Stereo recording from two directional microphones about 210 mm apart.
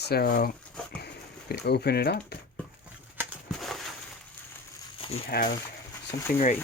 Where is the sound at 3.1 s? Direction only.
5° right (ahead or behind).